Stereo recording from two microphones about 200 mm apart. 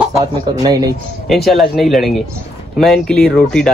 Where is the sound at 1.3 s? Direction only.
Centre (ahead or behind).